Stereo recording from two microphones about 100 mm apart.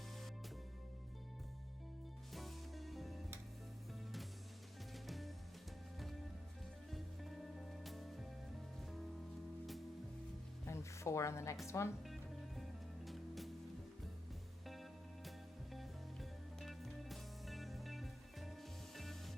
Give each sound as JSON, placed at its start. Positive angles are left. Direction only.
{"t": 2.3, "sound": "music", "side_deg": 0}
{"t": 5.0, "sound": "music", "side_deg": 0}
{"t": 6.9, "sound": "music", "side_deg": 0}
{"t": 10.7, "sound": "a sound", "side_deg": 30}
{"t": 11.6, "sound": "speech", "side_deg": 30}
{"t": 12.0, "sound": "music", "side_deg": 0}
{"t": 14.7, "sound": "music", "side_deg": 0}
{"t": 16.6, "sound": "music", "side_deg": 0}